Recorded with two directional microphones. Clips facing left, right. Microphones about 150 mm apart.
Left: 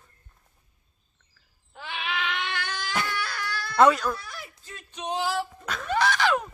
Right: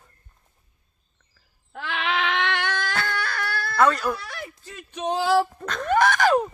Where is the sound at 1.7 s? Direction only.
75° right (ahead or behind).